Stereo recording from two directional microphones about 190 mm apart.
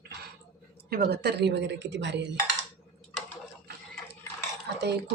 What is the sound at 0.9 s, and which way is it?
Speech, 55° right (ahead or behind).